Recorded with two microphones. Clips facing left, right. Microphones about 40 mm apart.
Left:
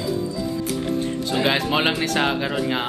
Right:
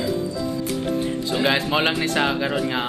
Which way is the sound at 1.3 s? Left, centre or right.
Centre.